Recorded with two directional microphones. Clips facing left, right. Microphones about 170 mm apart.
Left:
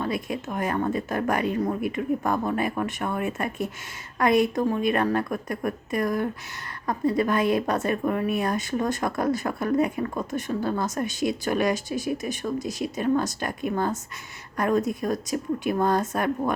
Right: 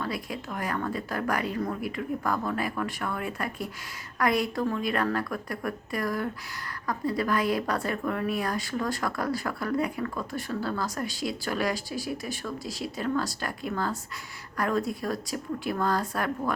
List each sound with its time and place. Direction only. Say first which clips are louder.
0.0 s a woman's voice: left 5 dB; 20° left (ahead or behind)